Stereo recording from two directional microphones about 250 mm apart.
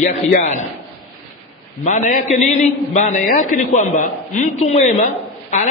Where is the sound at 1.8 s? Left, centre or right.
Left.